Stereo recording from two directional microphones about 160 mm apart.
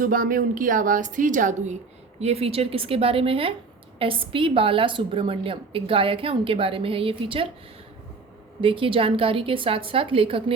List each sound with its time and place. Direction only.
0.0 s a woman's voice: 55° right (ahead or behind)
2.2 s a woman's voice: 40° right (ahead or behind)
8.6 s a woman's voice: 35° right (ahead or behind)